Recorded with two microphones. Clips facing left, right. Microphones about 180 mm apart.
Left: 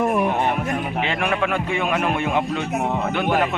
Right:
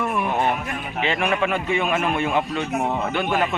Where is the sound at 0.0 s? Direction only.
40° left (ahead or behind).